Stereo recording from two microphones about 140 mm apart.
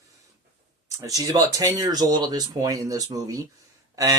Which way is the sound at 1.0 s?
25° right (ahead or behind).